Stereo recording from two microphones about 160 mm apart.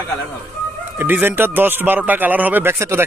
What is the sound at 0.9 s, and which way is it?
Speech, 10° right (ahead or behind).